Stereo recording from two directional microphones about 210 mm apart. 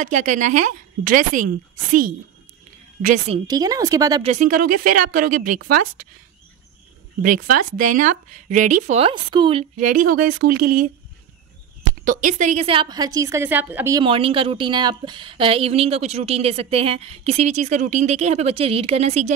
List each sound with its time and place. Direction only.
0.0 s speech: 35° right (ahead or behind)
3.3 s speech: 20° right (ahead or behind)
4.2 s speech: 35° right (ahead or behind)
7.2 s speech: 45° right (ahead or behind); by 9.7 s 25° right (ahead or behind)
9.8 s speech: 40° right (ahead or behind)
12.0 s a woman's voice: 40° right (ahead or behind); by 14.0 s 10° right (ahead or behind)
14.0 s a woman's voice: 25° right (ahead or behind)